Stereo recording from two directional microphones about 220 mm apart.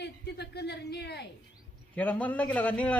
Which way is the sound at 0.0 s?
50° left (ahead or behind).